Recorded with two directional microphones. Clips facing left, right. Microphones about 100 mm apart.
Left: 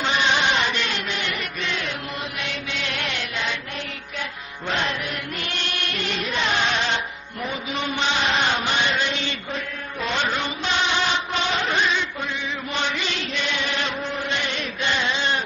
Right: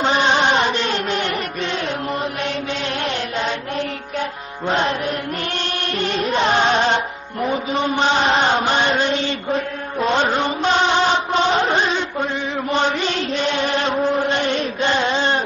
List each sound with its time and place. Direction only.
0.0 s music: 35° right (ahead or behind)
2.4 s chant: 40° right (ahead or behind)
5.5 s music: 35° right (ahead or behind)
7.4 s chant: 35° right (ahead or behind)